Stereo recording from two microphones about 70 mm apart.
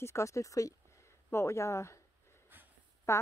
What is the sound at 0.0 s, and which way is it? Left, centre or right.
A woman's voice, left.